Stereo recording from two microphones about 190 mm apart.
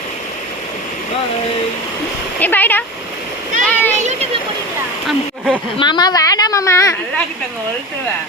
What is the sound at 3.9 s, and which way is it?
Children playing, 40° right (ahead or behind).